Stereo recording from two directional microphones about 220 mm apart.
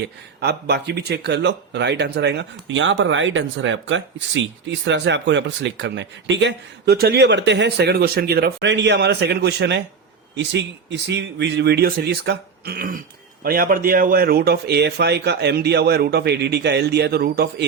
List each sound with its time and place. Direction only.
0.3 s speech: 50° right (ahead or behind)